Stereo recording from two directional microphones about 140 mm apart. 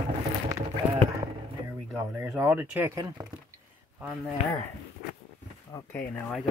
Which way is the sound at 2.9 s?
25° right (ahead or behind).